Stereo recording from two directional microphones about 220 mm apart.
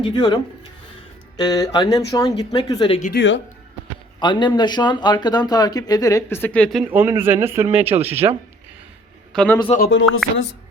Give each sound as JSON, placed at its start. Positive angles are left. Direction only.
{"t": 0.0, "sound": "speech", "side_deg": 20}
{"t": 1.4, "sound": "speech", "side_deg": 15}
{"t": 3.0, "sound": "speech", "side_deg": 50}
{"t": 4.2, "sound": "speech", "side_deg": 20}
{"t": 9.3, "sound": "speech", "side_deg": 5}
{"t": 9.7, "sound": "speech", "side_deg": 50}